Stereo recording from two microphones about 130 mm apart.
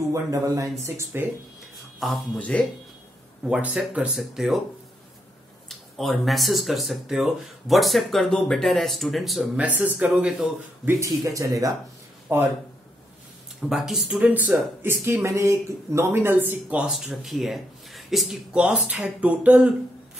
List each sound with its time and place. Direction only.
0.1 s speech: 25° right (ahead or behind)
2.0 s speech: centre (ahead or behind)
3.4 s speech: 5° right (ahead or behind)
5.7 s speech: centre (ahead or behind)
9.7 s speech: 10° right (ahead or behind)
10.9 s speech: 25° right (ahead or behind)
13.6 s speech: 5° right (ahead or behind)